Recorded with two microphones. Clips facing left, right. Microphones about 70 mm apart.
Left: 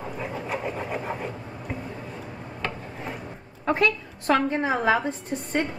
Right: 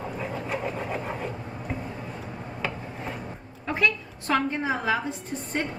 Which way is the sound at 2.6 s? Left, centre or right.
Centre.